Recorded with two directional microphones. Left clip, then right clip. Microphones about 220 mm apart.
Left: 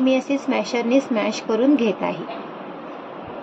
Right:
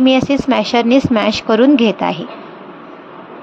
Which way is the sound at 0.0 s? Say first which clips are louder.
Right 7 dB; 45° right (ahead or behind).